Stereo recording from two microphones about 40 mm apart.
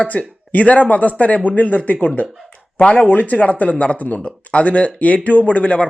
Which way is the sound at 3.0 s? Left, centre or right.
Left.